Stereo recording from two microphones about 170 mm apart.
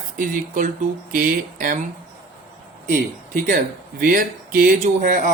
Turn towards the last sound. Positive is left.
turn(degrees=-50)  # may be behind; listen again after turning